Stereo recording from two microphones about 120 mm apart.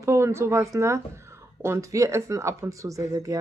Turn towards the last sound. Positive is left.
turn(degrees=-30)  # may be behind; listen again after turning